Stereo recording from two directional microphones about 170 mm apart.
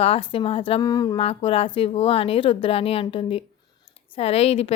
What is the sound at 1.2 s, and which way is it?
A woman's voice, 35° left (ahead or behind).